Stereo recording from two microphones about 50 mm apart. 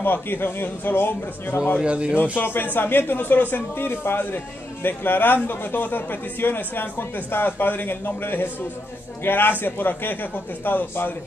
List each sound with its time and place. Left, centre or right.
0.0 s speech: left
1.8 s a man's voice: centre
2.3 s a man's voice: left